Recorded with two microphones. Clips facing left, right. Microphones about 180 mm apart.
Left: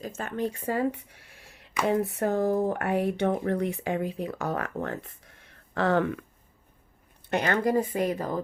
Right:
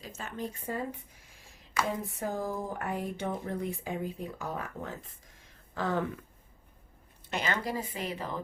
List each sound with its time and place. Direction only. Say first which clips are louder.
0.0 s speech: left 8 dB; 50° left (ahead or behind); by 6.2 s 75° left (ahead or behind)
7.3 s a woman's voice: left 8 dB; 60° left (ahead or behind)